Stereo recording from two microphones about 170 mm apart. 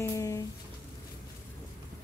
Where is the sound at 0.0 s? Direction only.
20° left (ahead or behind).